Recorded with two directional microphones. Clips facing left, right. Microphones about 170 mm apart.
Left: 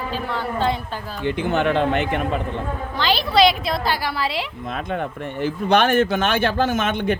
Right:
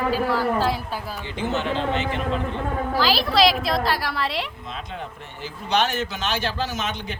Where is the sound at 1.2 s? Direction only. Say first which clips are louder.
Left 7 dB; 60° left (ahead or behind).